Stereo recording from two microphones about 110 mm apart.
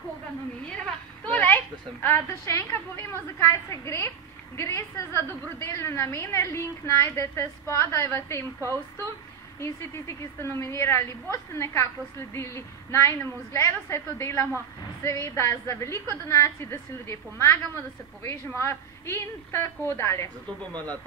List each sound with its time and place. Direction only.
1.2 s a woman's voice: 15° left (ahead or behind)
8.5 s a woman's voice: 30° right (ahead or behind)
9.6 s a woman's voice: 25° left (ahead or behind)
20.7 s speech: 35° right (ahead or behind)